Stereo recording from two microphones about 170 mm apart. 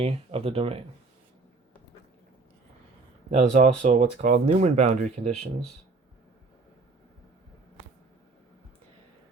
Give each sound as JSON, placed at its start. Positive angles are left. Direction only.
{"t": 0.0, "sound": "speech", "side_deg": -35}
{"t": 3.2, "sound": "speech", "side_deg": -40}